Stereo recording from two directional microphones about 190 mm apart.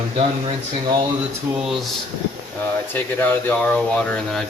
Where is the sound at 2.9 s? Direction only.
10° left (ahead or behind).